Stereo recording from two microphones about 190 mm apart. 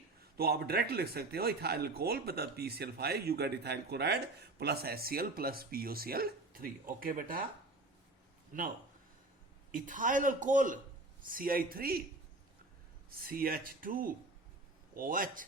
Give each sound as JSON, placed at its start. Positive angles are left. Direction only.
{"t": 0.2, "sound": "speech", "side_deg": -55}
{"t": 9.7, "sound": "speech", "side_deg": -45}
{"t": 13.1, "sound": "speech", "side_deg": -50}